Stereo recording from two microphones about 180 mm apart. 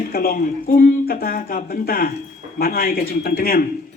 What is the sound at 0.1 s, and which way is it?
A man's voice, 55° left (ahead or behind).